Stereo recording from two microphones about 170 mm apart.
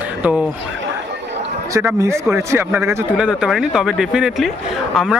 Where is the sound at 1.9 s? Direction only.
15° right (ahead or behind).